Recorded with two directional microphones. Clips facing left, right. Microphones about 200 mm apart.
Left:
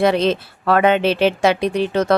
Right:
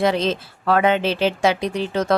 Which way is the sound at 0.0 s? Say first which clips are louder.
Left 4 dB; 65° left (ahead or behind).